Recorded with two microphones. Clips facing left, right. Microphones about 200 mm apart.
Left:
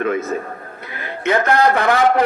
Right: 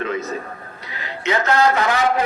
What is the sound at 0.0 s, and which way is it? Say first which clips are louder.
A man's voice: left 4 dB; 50° left (ahead or behind).